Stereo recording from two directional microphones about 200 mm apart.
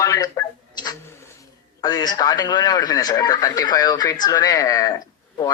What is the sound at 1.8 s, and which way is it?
A man's voice, 20° left (ahead or behind).